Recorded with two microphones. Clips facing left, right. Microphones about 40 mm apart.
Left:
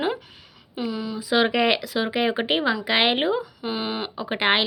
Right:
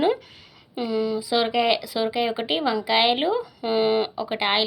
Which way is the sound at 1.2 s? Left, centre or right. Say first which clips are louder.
Left 6 dB; left.